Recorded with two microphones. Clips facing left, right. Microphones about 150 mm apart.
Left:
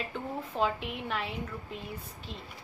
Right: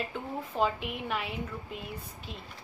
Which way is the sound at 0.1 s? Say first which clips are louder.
Even; 5° right (ahead or behind).